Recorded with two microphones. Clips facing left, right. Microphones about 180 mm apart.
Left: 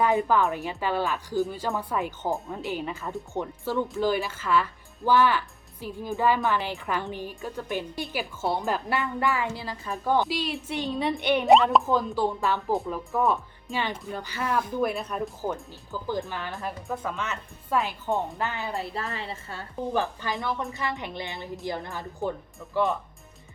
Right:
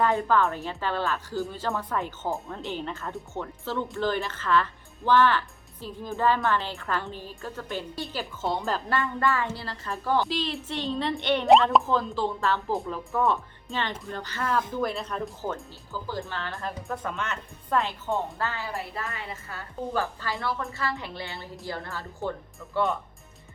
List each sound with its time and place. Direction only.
0.0 s speech: 15° left (ahead or behind)
16.9 s speech: 5° left (ahead or behind); by 18.8 s 20° left (ahead or behind)
18.9 s speech: 30° left (ahead or behind)